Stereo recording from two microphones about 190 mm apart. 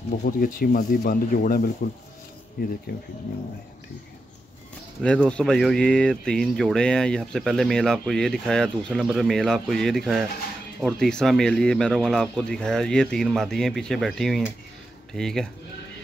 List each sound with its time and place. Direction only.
0.2 s speech: 45° left (ahead or behind)
5.0 s speech: 5° left (ahead or behind)